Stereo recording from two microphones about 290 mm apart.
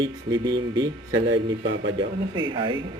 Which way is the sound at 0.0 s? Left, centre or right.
Centre.